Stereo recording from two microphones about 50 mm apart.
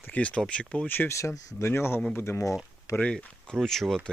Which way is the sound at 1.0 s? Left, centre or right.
Left.